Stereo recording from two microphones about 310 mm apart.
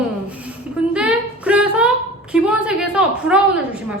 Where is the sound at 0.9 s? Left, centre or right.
Centre.